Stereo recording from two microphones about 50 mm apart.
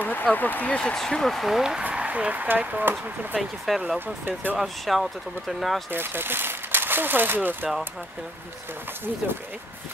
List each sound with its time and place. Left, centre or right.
0.0 s speech: left
0.7 s speech: centre
1.8 s speech: right
2.8 s speech: right
3.3 s speech: centre
4.3 s speech: right
4.6 s speech: centre
5.9 s speech: right